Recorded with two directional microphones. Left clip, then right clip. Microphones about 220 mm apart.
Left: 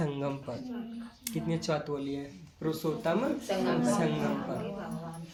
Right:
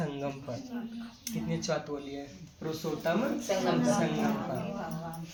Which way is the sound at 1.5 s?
45° left (ahead or behind).